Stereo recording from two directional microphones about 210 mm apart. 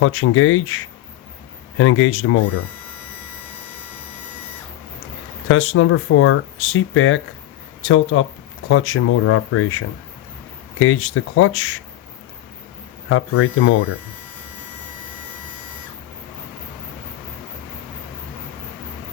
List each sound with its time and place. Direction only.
0.0 s speech: 75° left (ahead or behind)
1.8 s speech: 75° left (ahead or behind)
5.5 s speech: 75° left (ahead or behind)
13.1 s speech: 80° left